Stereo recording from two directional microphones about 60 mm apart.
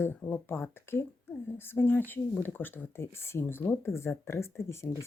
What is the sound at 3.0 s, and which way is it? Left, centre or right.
Speech, left.